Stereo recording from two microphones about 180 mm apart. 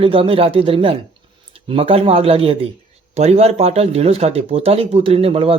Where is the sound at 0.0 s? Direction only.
30° right (ahead or behind).